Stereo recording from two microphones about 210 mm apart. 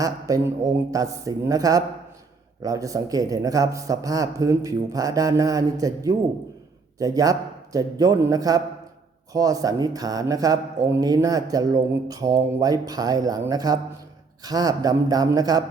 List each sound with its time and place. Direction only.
0.0 s speech: 15° right (ahead or behind)